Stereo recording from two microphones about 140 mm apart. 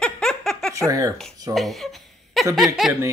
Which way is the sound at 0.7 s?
25° right (ahead or behind).